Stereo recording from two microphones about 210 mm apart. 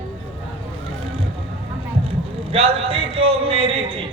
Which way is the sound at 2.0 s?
25° right (ahead or behind).